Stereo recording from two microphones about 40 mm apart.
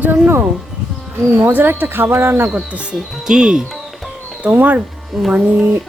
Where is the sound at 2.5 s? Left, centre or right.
Right.